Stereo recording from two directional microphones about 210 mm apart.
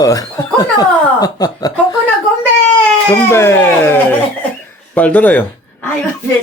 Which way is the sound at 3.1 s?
10° left (ahead or behind).